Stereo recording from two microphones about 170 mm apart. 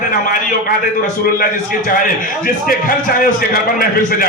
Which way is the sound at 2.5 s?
55° left (ahead or behind).